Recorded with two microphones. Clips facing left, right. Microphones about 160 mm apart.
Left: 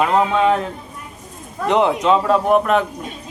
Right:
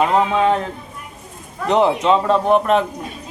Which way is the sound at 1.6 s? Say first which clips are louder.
Even; centre (ahead or behind).